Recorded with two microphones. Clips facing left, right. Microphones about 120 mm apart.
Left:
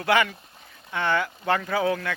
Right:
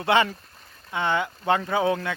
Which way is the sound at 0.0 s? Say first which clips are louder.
Right 1 dB; 25° right (ahead or behind).